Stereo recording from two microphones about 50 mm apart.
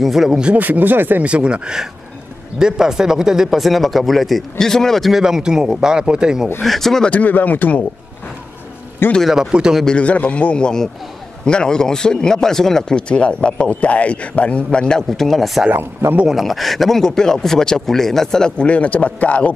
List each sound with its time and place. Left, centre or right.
0.0 s speech: centre
0.6 s speech: right
1.2 s speech: right; by 5.1 s centre
5.1 s speech: centre
6.6 s speech: centre
7.1 s speech: left
9.3 s speech: centre
9.8 s a man's voice: left
18.7 s a man's voice: left